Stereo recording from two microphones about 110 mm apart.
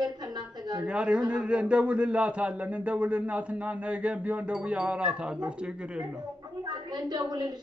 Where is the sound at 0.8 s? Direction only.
10° right (ahead or behind).